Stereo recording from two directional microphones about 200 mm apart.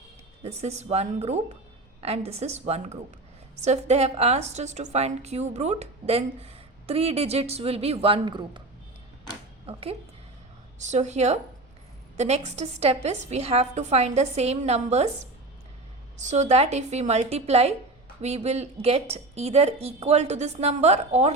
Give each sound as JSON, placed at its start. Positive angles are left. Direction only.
{"t": 0.4, "sound": "a woman's voice", "side_deg": -35}
{"t": 10.8, "sound": "a woman's voice", "side_deg": -35}